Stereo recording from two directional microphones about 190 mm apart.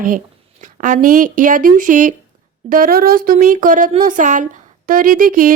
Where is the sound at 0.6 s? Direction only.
45° right (ahead or behind).